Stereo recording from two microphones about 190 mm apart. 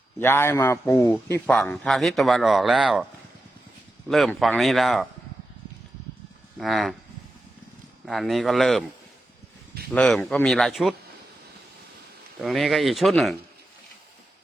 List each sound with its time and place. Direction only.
0.2 s a man's voice: 10° left (ahead or behind)
4.1 s a man's voice: centre (ahead or behind)
6.6 s a man's voice: centre (ahead or behind)
8.0 s a man's voice: centre (ahead or behind)
9.9 s a man's voice: 5° left (ahead or behind)
12.4 s a man's voice: centre (ahead or behind)